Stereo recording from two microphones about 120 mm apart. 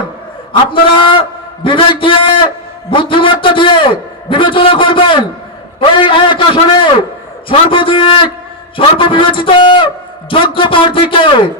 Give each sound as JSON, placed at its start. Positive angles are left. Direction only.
{"t": 0.5, "sound": "a man's voice", "side_deg": 45}